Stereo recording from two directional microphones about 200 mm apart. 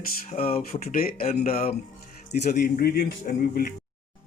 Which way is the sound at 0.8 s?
45° left (ahead or behind).